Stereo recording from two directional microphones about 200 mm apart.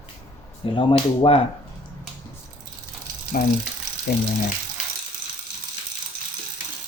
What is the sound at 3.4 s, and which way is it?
Speech, 50° left (ahead or behind).